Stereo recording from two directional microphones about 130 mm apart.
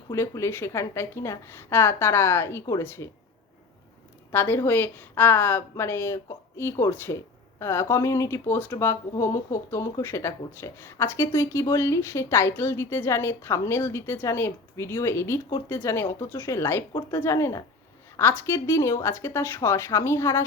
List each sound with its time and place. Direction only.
0.1 s speech: 20° left (ahead or behind)
4.3 s a woman's voice: 15° left (ahead or behind)